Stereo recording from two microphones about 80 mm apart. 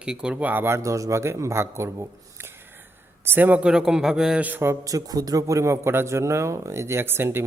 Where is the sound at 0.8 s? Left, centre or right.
Right.